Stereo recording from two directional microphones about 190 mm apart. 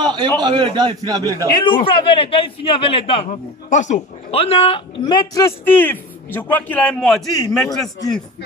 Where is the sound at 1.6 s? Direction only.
25° left (ahead or behind); by 7.6 s centre (ahead or behind).